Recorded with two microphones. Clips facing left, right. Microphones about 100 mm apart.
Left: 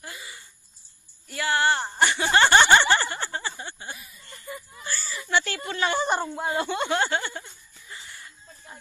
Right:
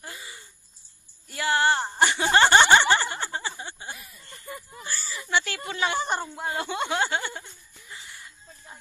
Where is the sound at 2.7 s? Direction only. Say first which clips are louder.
Even; 15° right (ahead or behind).